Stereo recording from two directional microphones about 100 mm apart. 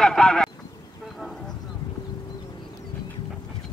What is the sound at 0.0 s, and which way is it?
Honk, 5° left (ahead or behind).